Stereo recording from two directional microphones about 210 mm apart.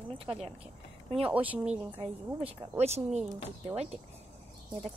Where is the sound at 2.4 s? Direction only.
25° right (ahead or behind).